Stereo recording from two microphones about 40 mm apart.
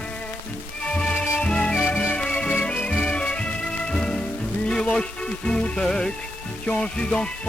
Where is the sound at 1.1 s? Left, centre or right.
Left.